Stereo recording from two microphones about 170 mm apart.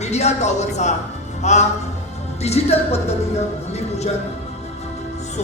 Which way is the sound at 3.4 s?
40° left (ahead or behind).